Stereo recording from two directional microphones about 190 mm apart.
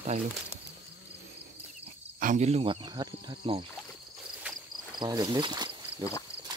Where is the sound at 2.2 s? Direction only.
40° right (ahead or behind).